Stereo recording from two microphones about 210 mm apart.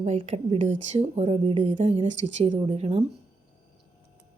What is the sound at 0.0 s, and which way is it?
Speech, 30° right (ahead or behind).